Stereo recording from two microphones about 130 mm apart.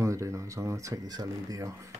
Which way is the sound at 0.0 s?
25° right (ahead or behind).